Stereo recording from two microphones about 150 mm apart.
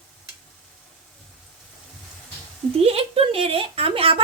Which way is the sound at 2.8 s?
40° right (ahead or behind).